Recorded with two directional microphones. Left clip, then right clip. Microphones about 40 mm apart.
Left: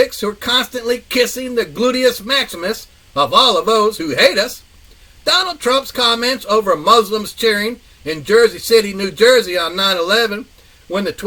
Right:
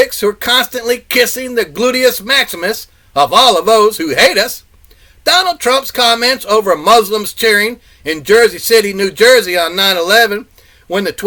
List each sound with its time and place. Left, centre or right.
0.2 s a man's voice: right